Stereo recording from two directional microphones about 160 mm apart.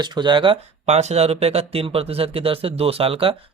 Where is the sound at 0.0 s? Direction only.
30° right (ahead or behind).